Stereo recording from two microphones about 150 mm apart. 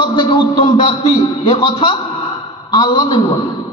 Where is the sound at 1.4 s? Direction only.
35° left (ahead or behind).